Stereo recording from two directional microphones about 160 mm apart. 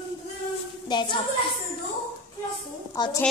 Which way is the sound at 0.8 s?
30° left (ahead or behind).